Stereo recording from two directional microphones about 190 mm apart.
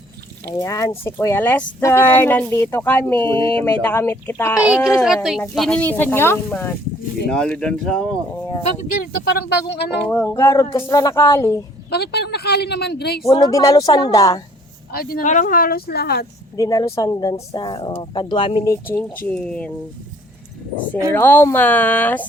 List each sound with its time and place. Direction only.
0.5 s speech: 15° left (ahead or behind)
5.0 s speech: centre (ahead or behind)
8.6 s speech: 40° left (ahead or behind)
9.3 s speech: 60° left (ahead or behind)
10.0 s speech: 10° left (ahead or behind)
11.9 s speech: 60° left (ahead or behind)
13.3 s speech: 20° left (ahead or behind)
14.9 s speech: 50° left (ahead or behind)
16.6 s speech: 20° left (ahead or behind)
18.7 s speech: 10° left (ahead or behind)
21.1 s speech: 10° left (ahead or behind)